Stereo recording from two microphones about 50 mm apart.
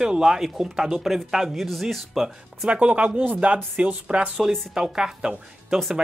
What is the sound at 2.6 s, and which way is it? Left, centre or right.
Speech, right.